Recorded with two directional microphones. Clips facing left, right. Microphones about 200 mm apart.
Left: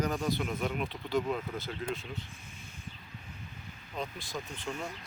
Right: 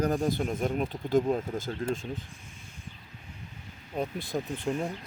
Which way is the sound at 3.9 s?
55° right (ahead or behind).